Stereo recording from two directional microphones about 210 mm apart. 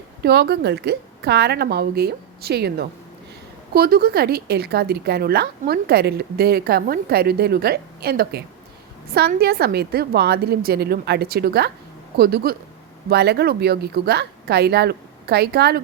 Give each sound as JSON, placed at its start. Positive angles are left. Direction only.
{"t": 0.2, "sound": "a woman's voice", "side_deg": -50}